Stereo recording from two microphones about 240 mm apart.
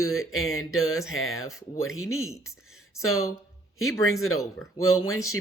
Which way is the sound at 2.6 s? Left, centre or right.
Left.